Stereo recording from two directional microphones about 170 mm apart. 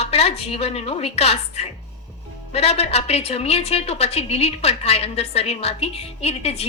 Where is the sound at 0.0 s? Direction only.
40° left (ahead or behind).